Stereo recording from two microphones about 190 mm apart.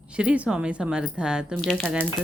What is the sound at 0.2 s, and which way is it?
Speech, 5° right (ahead or behind).